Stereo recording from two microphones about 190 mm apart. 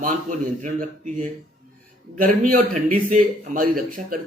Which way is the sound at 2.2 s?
45° right (ahead or behind).